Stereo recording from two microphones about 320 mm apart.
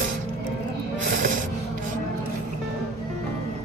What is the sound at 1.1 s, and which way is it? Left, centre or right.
Music, right.